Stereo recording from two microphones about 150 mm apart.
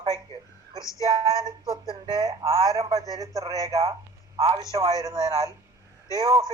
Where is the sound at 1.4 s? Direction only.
25° right (ahead or behind).